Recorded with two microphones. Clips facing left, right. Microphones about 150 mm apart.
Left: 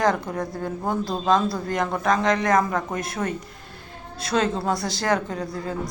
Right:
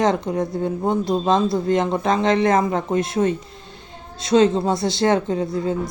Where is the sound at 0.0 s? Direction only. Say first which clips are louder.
Right 3 dB; 20° right (ahead or behind).